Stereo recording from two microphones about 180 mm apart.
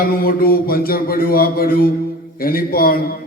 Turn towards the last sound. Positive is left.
turn(degrees=55)  # may be behind; listen again after turning